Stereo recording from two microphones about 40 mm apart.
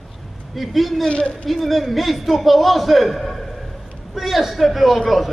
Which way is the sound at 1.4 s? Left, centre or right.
Centre.